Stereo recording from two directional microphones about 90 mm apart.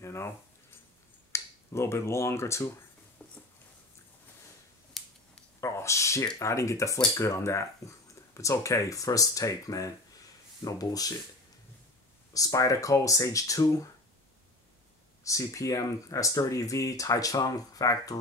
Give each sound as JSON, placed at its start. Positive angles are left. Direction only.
{"t": 0.0, "sound": "keys jangling", "side_deg": 30}
{"t": 1.3, "sound": "speech", "side_deg": 30}
{"t": 3.2, "sound": "a sound", "side_deg": 20}
{"t": 5.0, "sound": "a sound", "side_deg": 0}
{"t": 5.6, "sound": "speech", "side_deg": 30}
{"t": 12.4, "sound": "speech", "side_deg": 40}
{"t": 15.2, "sound": "speech", "side_deg": 35}